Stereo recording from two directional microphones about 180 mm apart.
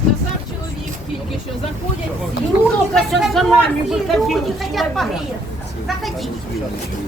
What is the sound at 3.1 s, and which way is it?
Speech, centre (ahead or behind).